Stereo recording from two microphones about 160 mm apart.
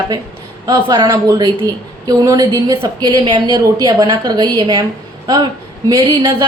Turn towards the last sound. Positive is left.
turn(degrees=-25)  # may be behind; listen again after turning